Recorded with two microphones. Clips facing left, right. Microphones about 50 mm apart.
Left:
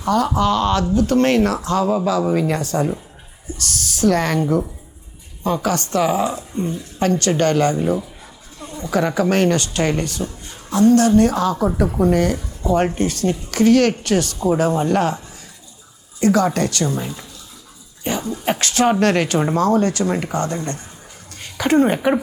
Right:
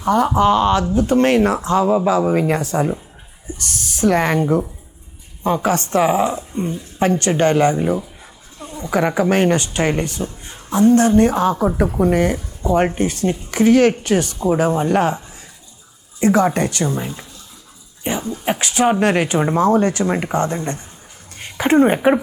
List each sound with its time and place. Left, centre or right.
0.0 s speech: right
5.6 s speech: right
8.5 s a sound: right
9.3 s speech: right
16.2 s speech: right